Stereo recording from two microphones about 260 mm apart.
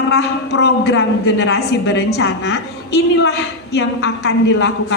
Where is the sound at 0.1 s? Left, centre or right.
Left.